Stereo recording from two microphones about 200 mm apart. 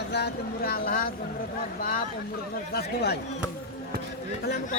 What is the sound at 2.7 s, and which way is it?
Speech, 55° left (ahead or behind).